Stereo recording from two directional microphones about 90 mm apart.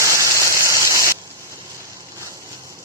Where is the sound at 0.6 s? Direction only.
35° right (ahead or behind).